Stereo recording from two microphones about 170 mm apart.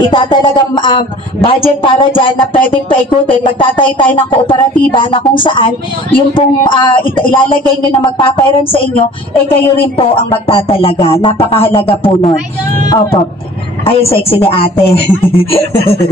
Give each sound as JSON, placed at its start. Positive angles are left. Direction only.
{"t": 0.1, "sound": "speech", "side_deg": 30}
{"t": 9.5, "sound": "music", "side_deg": 35}
{"t": 13.8, "sound": "music", "side_deg": 35}